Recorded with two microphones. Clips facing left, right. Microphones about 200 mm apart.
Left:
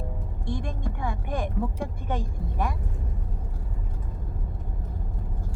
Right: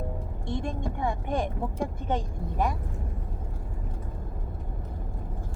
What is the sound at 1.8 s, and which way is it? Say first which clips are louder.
Speech: right 2 dB; 20° right (ahead or behind).